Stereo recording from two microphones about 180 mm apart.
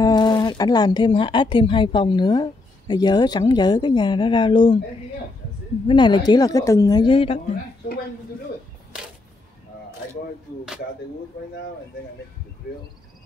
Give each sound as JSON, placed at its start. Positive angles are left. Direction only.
{"t": 0.0, "sound": "speech", "side_deg": 25}
{"t": 5.9, "sound": "speech", "side_deg": 25}